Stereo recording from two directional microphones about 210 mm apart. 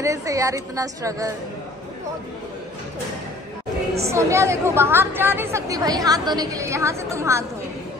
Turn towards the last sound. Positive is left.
turn(degrees=-15)  # may be behind; listen again after turning